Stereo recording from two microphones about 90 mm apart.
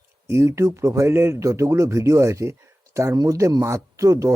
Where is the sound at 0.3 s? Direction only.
30° right (ahead or behind).